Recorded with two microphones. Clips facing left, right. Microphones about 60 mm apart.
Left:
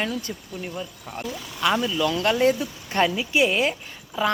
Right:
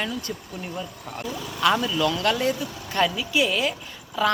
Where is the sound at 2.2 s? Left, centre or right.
Left.